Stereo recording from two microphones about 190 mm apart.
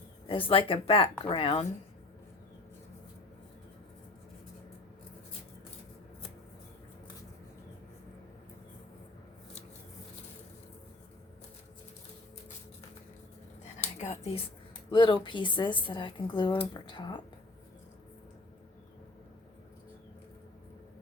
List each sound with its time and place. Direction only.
0.3 s speech: 30° left (ahead or behind)
13.7 s dishes: 35° left (ahead or behind)
14.8 s speech: 25° left (ahead or behind)